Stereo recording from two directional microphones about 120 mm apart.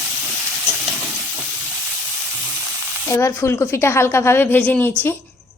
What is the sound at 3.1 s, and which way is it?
A woman's voice, 25° left (ahead or behind).